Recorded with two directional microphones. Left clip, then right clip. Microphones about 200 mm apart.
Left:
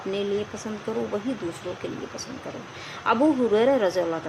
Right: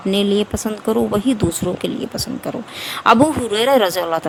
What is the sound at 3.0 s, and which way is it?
A woman's voice, 50° right (ahead or behind).